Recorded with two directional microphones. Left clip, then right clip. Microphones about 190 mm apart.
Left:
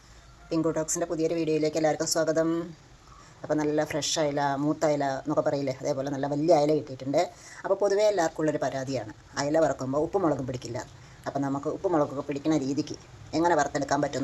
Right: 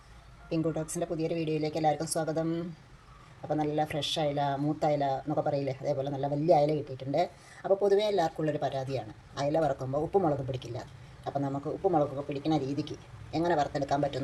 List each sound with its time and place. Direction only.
0.5 s speech: 15° left (ahead or behind)